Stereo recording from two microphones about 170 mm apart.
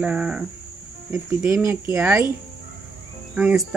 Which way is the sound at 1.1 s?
15° right (ahead or behind).